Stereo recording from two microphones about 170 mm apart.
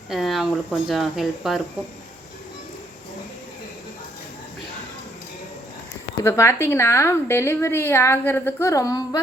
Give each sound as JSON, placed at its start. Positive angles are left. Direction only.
{"t": 0.1, "sound": "speech", "side_deg": 0}
{"t": 6.2, "sound": "a woman's voice", "side_deg": 15}